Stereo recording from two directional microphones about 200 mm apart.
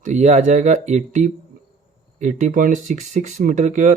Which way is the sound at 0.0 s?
35° right (ahead or behind).